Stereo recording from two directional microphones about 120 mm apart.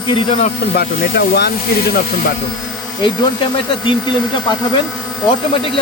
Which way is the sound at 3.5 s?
40° left (ahead or behind).